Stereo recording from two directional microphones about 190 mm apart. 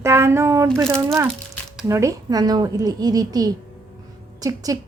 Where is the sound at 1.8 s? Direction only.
15° right (ahead or behind).